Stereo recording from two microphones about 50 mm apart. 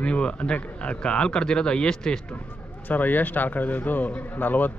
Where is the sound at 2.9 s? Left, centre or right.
Left.